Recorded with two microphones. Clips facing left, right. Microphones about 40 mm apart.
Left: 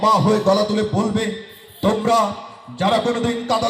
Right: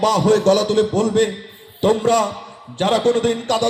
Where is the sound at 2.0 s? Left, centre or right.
Left.